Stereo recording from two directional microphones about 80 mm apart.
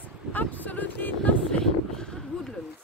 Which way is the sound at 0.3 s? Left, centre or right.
Left.